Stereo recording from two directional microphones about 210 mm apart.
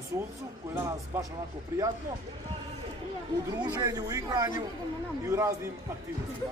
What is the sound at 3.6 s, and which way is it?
A man's voice, 15° right (ahead or behind).